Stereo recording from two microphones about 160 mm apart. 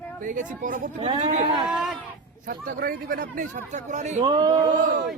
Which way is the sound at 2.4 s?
60° right (ahead or behind).